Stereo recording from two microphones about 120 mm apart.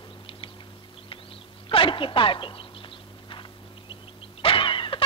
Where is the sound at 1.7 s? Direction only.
45° left (ahead or behind).